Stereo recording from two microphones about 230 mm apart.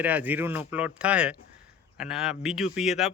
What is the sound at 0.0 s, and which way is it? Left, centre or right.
A man's voice, centre.